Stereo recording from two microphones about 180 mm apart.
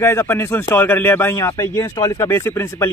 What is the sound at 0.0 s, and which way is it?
Speech, 15° left (ahead or behind).